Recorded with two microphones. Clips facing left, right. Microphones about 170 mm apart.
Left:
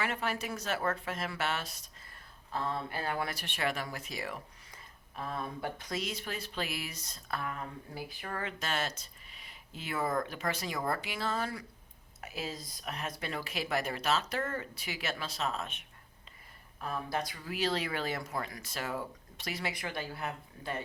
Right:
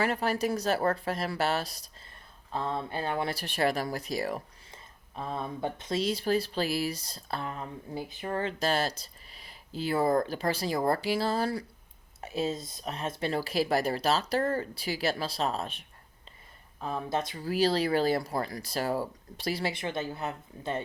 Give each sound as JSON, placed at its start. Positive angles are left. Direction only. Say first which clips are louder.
{"t": 0.0, "sound": "speech", "louder": "right 7 dB", "side_deg": -35}
{"t": 2.5, "sound": "speech", "louder": "right 3 dB", "side_deg": -25}
{"t": 4.7, "sound": "speech", "louder": "right 5 dB", "side_deg": -25}
{"t": 16.8, "sound": "speech", "louder": "right 4 dB", "side_deg": -25}
{"t": 17.4, "sound": "speech", "louder": "right 10 dB", "side_deg": -35}